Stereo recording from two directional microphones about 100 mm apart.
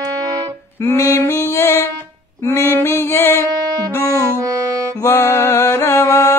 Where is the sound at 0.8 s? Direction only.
30° left (ahead or behind).